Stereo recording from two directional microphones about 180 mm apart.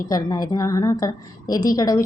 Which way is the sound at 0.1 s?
20° left (ahead or behind).